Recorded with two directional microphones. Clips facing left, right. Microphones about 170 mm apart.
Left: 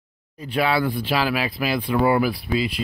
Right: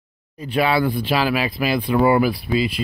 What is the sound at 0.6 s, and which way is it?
Speech, 20° right (ahead or behind).